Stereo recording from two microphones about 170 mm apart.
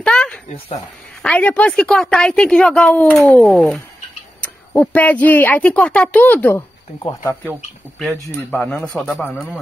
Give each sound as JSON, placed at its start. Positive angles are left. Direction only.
{"t": 0.0, "sound": "a sound", "side_deg": 5}
{"t": 1.2, "sound": "a woman's voice", "side_deg": 5}
{"t": 8.5, "sound": "a woman's voice", "side_deg": 5}